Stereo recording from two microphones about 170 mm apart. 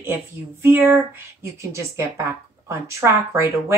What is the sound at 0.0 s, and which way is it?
Speech, 15° right (ahead or behind).